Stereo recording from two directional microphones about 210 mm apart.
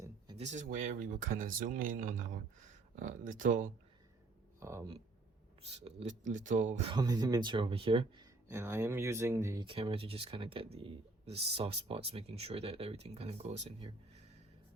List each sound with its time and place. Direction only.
0.3 s speech: 35° right (ahead or behind)
4.6 s speech: 15° right (ahead or behind)
6.2 s speech: 35° right (ahead or behind)
6.9 s speech: 20° right (ahead or behind)
8.4 s speech: 10° right (ahead or behind)
9.6 s speech: 25° right (ahead or behind)